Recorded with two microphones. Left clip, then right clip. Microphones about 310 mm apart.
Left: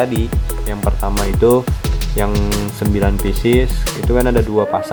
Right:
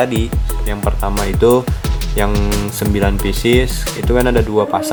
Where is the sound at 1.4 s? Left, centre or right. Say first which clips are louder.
Right 1 dB; left.